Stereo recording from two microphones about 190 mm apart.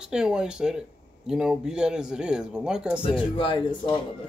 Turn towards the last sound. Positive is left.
turn(degrees=25)  # may be behind; listen again after turning